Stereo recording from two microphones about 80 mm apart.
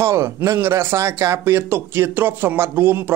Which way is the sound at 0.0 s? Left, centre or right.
Right.